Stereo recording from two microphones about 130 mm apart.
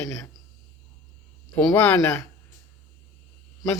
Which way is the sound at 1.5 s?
10° left (ahead or behind).